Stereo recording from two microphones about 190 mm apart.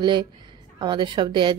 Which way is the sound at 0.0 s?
25° right (ahead or behind).